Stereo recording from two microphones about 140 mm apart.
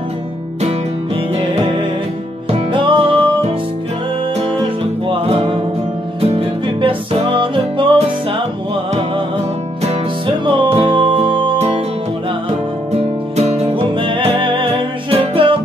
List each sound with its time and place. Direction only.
2.7 s music: 35° right (ahead or behind)
5.1 s music: 40° right (ahead or behind)
10.4 s music: 40° right (ahead or behind)
12.9 s music: 50° right (ahead or behind)